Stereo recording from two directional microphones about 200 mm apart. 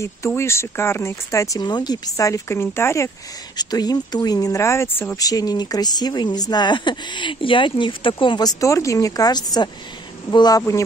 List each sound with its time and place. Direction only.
0.0 s speech: 15° left (ahead or behind)